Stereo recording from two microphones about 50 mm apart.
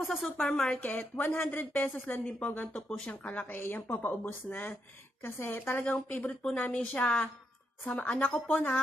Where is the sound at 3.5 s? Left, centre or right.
Left.